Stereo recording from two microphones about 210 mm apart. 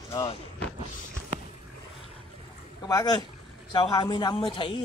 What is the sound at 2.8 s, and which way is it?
Speech, 15° left (ahead or behind).